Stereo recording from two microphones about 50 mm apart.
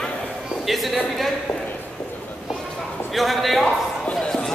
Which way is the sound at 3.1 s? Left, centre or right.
Centre.